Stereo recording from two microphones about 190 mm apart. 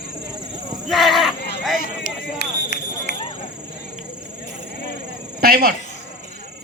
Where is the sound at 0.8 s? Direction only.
Centre (ahead or behind).